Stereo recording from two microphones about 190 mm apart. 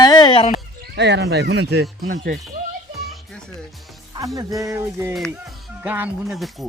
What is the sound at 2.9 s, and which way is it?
Music, centre (ahead or behind).